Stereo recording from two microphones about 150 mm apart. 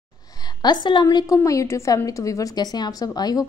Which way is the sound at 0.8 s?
30° left (ahead or behind).